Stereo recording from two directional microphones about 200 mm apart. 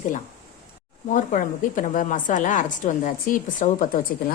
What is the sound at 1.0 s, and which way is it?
A woman's voice, 40° left (ahead or behind).